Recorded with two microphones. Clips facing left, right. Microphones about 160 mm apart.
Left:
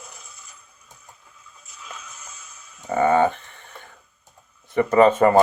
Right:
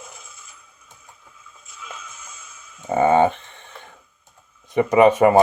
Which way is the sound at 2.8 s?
20° right (ahead or behind).